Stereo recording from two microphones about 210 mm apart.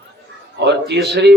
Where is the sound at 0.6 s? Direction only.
55° right (ahead or behind).